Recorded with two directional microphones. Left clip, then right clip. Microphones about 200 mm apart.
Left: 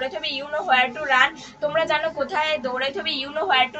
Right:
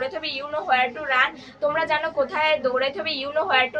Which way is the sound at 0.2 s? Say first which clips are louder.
Left 1 dB; 20° right (ahead or behind).